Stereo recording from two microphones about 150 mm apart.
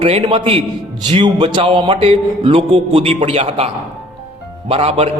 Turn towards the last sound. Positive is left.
turn(degrees=-40)  # may be behind; listen again after turning